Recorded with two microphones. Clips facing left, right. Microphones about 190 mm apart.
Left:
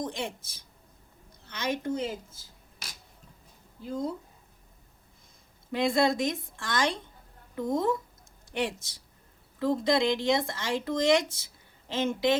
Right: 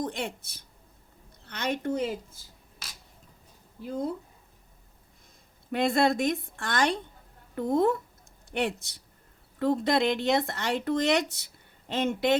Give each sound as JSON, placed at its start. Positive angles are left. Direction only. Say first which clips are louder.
{"t": 0.0, "sound": "a woman's voice", "louder": "right 2 dB", "side_deg": -60}
{"t": 5.7, "sound": "speech", "louder": "right 1 dB", "side_deg": -60}